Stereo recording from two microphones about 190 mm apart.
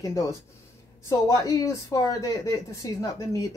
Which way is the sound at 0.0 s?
15° left (ahead or behind).